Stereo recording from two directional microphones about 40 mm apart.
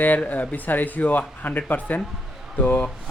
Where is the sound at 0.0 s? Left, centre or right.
Left.